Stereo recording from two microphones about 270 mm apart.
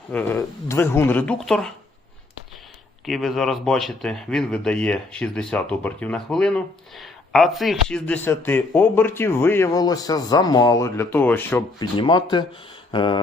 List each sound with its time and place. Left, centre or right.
0.1 s a man's voice: centre
3.1 s a man's voice: centre